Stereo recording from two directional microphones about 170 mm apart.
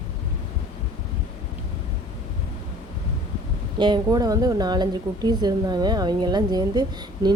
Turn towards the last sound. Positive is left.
turn(degrees=-25)  # may be behind; listen again after turning